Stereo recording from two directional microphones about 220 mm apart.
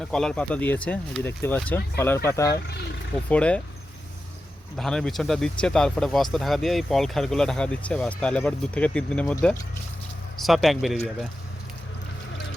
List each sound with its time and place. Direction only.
0.0 s speech: 5° left (ahead or behind)
2.6 s speech: 50° left (ahead or behind)
3.2 s speech: 5° left (ahead or behind)
4.8 s speech: centre (ahead or behind)